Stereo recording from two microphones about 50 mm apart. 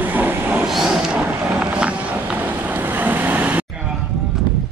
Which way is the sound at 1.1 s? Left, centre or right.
Right.